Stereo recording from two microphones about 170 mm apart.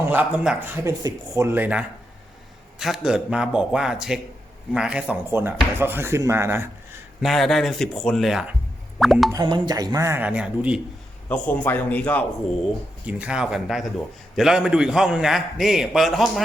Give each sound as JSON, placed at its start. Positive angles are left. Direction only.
{"t": 0.1, "sound": "a man's voice", "side_deg": -10}
{"t": 7.2, "sound": "a man's voice", "side_deg": 0}
{"t": 9.3, "sound": "speech", "side_deg": -25}
{"t": 11.3, "sound": "a man's voice", "side_deg": 10}
{"t": 13.1, "sound": "a man's voice", "side_deg": -5}